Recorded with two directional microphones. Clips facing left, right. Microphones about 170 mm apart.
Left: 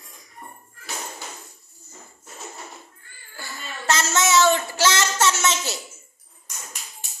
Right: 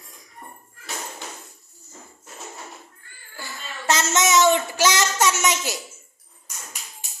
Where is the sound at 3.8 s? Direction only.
20° right (ahead or behind).